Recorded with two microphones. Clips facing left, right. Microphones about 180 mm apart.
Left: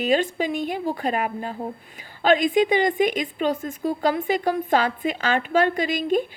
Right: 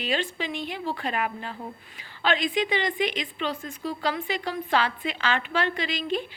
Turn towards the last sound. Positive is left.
turn(degrees=45)  # may be behind; listen again after turning